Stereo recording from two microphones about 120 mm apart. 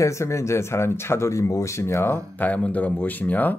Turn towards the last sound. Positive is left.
turn(degrees=15)  # may be behind; listen again after turning